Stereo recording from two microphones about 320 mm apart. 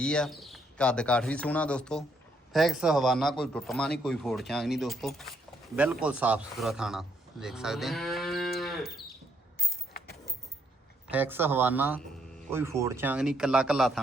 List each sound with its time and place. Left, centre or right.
0.0 s a man's voice: centre
9.6 s a sound: left
11.1 s a man's voice: centre